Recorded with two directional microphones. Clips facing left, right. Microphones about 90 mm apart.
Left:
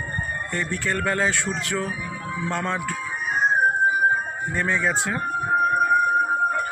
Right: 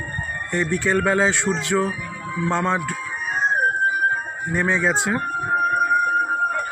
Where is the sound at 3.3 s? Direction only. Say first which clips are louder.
Even; 10° left (ahead or behind).